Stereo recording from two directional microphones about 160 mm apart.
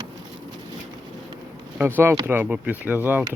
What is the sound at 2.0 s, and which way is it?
Speech, 15° right (ahead or behind).